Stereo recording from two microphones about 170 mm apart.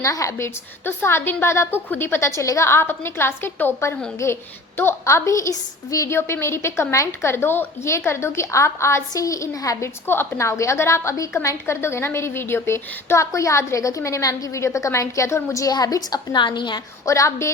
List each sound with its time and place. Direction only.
0.0 s a woman's voice: 20° left (ahead or behind)